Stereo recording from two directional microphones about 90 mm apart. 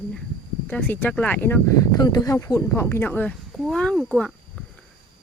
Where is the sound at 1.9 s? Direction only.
45° left (ahead or behind).